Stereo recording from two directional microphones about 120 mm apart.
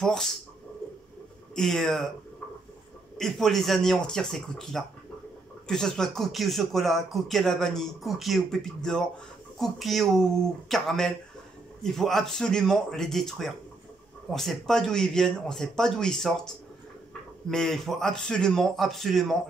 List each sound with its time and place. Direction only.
0.0 s speech: 5° left (ahead or behind)
1.5 s speech: 5° left (ahead or behind)
3.2 s speech: centre (ahead or behind)